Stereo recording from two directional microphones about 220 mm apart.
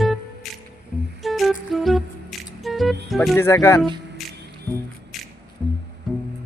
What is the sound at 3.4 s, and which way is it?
Speech, 10° left (ahead or behind).